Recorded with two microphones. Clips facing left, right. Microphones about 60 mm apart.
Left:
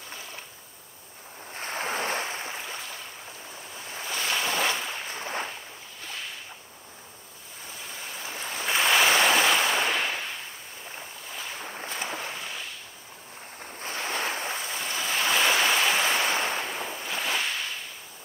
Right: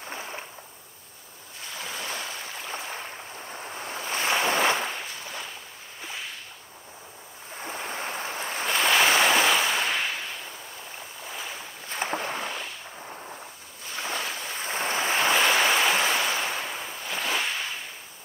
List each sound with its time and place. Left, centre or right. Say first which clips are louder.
0.1 s a sound: right 6 dB; right
1.6 s waves: left 6 dB; left
2.7 s boat: right 4 dB; right
5.1 s a sound: left 5 dB; left
7.6 s waves: right 8 dB; right
8.8 s waves: even; centre
11.6 s boat: left 5 dB; left
11.9 s boat: right 6 dB; right
13.7 s ocean: left 1 dB; left
14.6 s waves: right 4 dB; right
15.4 s waves: right 1 dB; centre
16.3 s waves: left 1 dB; left
17.1 s whip: right 2 dB; centre